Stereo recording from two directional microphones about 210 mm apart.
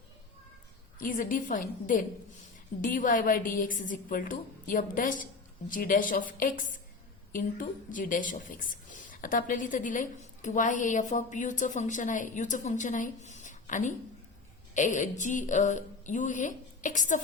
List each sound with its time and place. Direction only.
0.9 s a woman's voice: 40° left (ahead or behind)